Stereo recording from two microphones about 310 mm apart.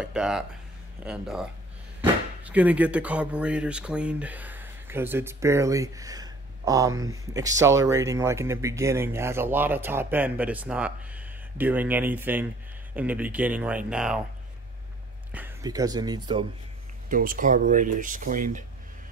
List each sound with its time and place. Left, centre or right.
0.0 s speech: centre
15.3 s speech: centre
17.1 s speech: right